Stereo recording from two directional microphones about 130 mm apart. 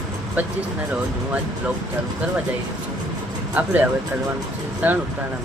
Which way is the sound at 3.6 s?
10° right (ahead or behind).